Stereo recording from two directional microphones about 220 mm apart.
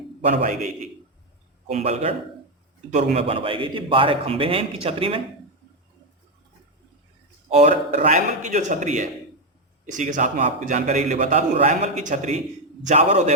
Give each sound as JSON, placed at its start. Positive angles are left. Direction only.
{"t": 0.3, "sound": "a man's voice", "side_deg": -30}
{"t": 1.7, "sound": "a man's voice", "side_deg": -30}
{"t": 7.5, "sound": "a man's voice", "side_deg": -30}